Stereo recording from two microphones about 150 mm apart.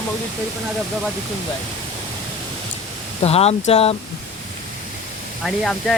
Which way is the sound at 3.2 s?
45° left (ahead or behind).